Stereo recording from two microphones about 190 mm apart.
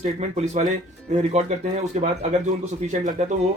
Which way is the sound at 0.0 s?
35° right (ahead or behind).